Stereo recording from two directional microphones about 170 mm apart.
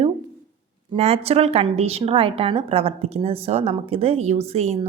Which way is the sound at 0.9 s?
35° right (ahead or behind).